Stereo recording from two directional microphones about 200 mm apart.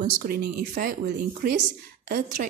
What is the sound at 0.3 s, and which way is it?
Speech, 50° right (ahead or behind).